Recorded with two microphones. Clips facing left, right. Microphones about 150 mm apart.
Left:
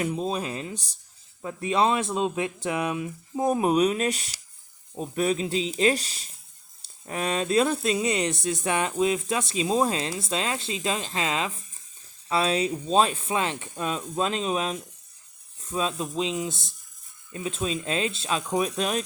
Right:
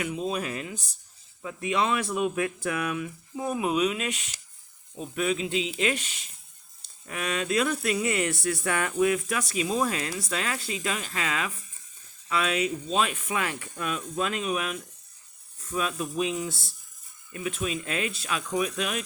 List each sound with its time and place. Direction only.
0.0 s speech: 35° left (ahead or behind)
3.4 s speech: 40° left (ahead or behind)